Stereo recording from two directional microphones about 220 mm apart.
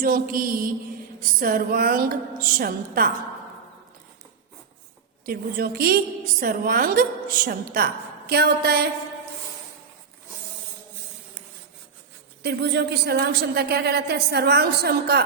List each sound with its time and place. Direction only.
0.0 s a woman's voice: 40° right (ahead or behind)
5.2 s a woman's voice: 45° right (ahead or behind)
12.4 s a woman's voice: 50° right (ahead or behind)